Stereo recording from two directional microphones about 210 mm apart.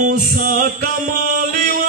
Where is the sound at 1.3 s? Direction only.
40° right (ahead or behind).